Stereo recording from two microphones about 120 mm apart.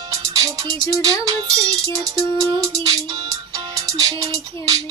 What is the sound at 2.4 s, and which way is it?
Music, 30° right (ahead or behind).